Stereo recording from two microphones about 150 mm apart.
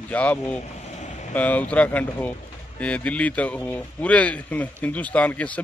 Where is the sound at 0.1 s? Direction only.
10° left (ahead or behind).